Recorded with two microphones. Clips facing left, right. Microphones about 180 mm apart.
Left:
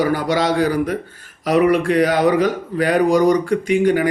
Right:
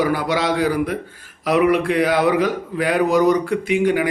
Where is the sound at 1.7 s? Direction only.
45° left (ahead or behind).